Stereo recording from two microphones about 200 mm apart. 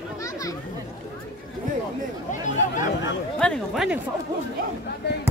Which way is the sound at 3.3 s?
5° left (ahead or behind).